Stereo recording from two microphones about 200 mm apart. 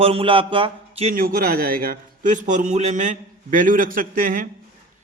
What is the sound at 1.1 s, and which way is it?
A man's voice, 45° right (ahead or behind).